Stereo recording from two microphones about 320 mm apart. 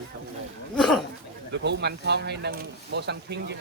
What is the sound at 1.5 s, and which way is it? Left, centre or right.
Speech, right.